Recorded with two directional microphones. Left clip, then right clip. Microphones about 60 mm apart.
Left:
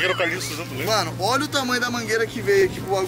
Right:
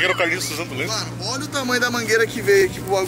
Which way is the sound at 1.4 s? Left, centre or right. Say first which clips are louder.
Left 2 dB; centre.